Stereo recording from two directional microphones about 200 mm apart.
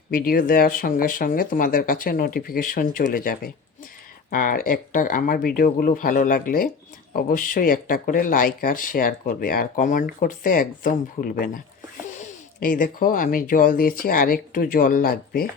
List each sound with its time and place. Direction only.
0.1 s speech: 45° left (ahead or behind)